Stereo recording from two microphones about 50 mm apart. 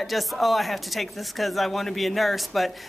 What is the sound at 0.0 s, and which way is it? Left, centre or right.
Speech, centre.